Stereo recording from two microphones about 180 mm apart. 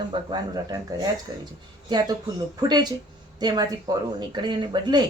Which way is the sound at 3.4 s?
25° right (ahead or behind).